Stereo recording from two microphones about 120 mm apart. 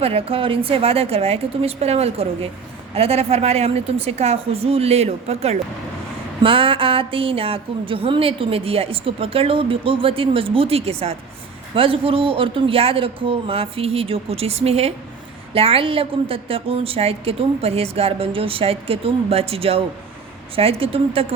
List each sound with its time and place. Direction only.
0.0 s a woman's voice: 55° right (ahead or behind)
6.4 s a woman's voice: 50° right (ahead or behind)